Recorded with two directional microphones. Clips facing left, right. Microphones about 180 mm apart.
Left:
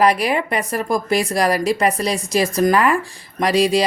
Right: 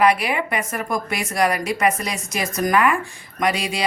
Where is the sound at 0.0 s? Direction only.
35° left (ahead or behind).